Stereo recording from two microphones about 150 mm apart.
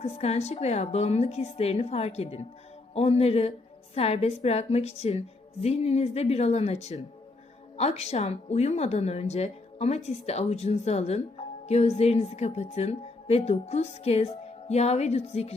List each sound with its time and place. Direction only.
0.0 s a woman's voice: 45° left (ahead or behind)